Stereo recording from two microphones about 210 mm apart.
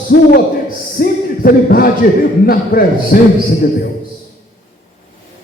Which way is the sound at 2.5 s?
45° left (ahead or behind).